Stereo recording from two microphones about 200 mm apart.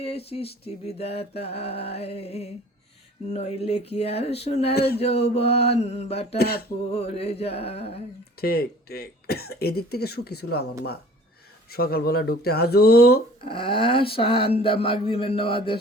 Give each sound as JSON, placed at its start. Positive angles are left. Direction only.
{"t": 0.0, "sound": "mantra", "side_deg": 30}
{"t": 3.2, "sound": "speech", "side_deg": 35}
{"t": 4.7, "sound": "speech", "side_deg": 50}
{"t": 4.9, "sound": "speech", "side_deg": 30}
{"t": 6.3, "sound": "speech", "side_deg": 50}
{"t": 6.9, "sound": "mantra", "side_deg": 30}
{"t": 8.4, "sound": "speech", "side_deg": 50}
{"t": 11.7, "sound": "speech", "side_deg": 50}
{"t": 13.4, "sound": "mantra", "side_deg": 25}